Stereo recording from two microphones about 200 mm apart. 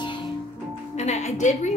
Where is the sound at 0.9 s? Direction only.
35° left (ahead or behind).